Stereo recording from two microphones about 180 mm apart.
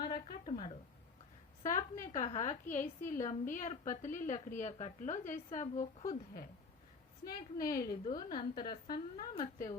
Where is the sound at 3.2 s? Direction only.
45° left (ahead or behind).